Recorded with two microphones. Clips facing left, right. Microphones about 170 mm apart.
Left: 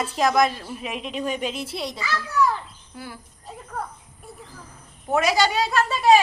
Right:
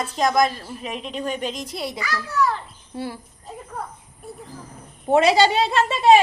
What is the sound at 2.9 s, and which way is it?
Speech, 30° right (ahead or behind).